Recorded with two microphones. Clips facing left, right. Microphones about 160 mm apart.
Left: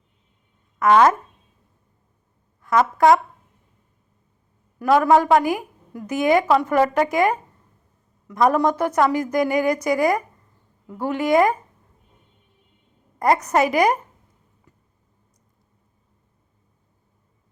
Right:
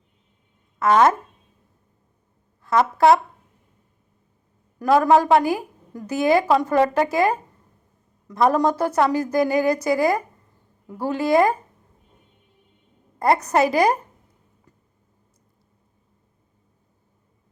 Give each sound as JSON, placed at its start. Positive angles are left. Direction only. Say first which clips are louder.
{"t": 0.8, "sound": "a woman's voice", "louder": "left 1 dB", "side_deg": -30}
{"t": 2.6, "sound": "a woman's voice", "louder": "even", "side_deg": -30}
{"t": 4.8, "sound": "a woman's voice", "louder": "even", "side_deg": -30}
{"t": 13.1, "sound": "a woman's voice", "louder": "even", "side_deg": -30}